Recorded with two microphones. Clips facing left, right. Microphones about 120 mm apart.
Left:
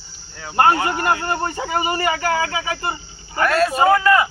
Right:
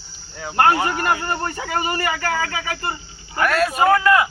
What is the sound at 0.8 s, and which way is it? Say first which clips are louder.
Speech: left 1 dB; 15° left (ahead or behind).